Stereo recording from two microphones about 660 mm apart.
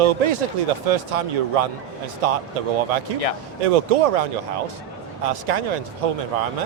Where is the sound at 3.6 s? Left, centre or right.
Right.